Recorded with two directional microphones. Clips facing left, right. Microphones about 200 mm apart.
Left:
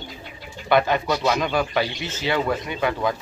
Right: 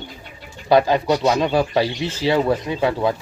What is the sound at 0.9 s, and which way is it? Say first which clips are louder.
Speech: right 4 dB; 30° right (ahead or behind).